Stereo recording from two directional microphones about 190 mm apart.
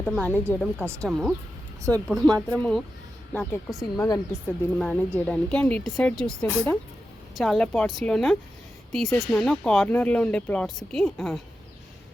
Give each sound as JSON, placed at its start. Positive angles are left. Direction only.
{"t": 0.0, "sound": "a woman's voice", "side_deg": 5}
{"t": 3.3, "sound": "a woman's voice", "side_deg": 15}